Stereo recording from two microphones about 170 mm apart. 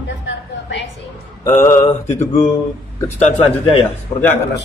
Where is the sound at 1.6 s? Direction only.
15° left (ahead or behind).